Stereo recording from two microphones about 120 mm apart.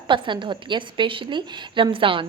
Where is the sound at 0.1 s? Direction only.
40° right (ahead or behind).